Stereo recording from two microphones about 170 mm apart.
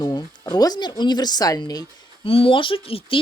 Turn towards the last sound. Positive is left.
turn(degrees=35)  # may be behind; listen again after turning